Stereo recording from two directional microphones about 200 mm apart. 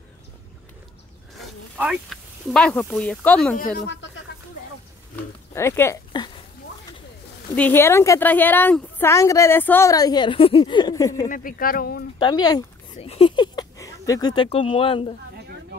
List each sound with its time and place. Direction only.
1.4 s speech: centre (ahead or behind)
3.5 s speech: 50° left (ahead or behind)
5.5 s speech: 15° left (ahead or behind)
7.5 s a woman's voice: 10° left (ahead or behind)
11.2 s speech: 45° left (ahead or behind)
12.2 s speech: 20° left (ahead or behind)